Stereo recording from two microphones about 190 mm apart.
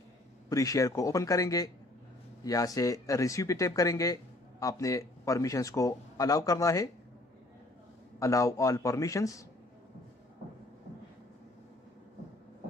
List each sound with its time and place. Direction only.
0.5 s speech: 15° left (ahead or behind)
8.2 s speech: 15° left (ahead or behind)